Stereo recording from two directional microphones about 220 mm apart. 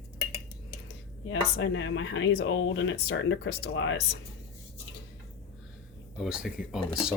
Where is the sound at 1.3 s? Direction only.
60° left (ahead or behind).